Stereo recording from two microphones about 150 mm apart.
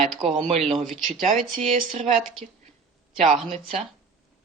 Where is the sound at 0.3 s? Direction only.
40° right (ahead or behind).